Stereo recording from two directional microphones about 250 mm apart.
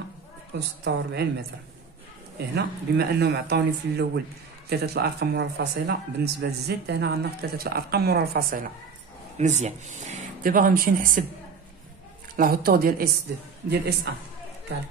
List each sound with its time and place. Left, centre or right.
0.5 s a woman's voice: right
2.3 s speech: right
12.4 s speech: right